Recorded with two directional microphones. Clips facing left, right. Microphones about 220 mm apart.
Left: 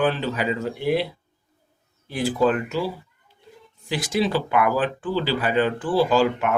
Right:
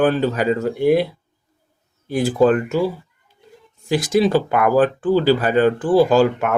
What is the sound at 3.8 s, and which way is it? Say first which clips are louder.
Speech: right 7 dB; 45° right (ahead or behind).